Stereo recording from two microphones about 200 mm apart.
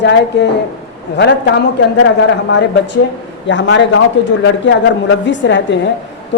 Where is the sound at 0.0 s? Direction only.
60° left (ahead or behind).